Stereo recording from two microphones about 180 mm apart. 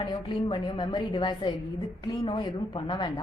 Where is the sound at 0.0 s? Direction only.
25° left (ahead or behind).